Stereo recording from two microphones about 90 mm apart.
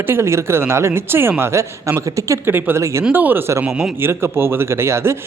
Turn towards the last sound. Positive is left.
turn(degrees=-30)  # may be behind; listen again after turning